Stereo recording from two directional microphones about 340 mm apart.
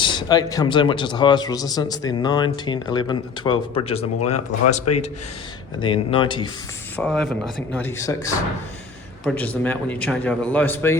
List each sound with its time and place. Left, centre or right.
0.0 s a man's voice: centre
4.9 s speech: left
5.8 s a man's voice: centre
6.9 s a man's voice: centre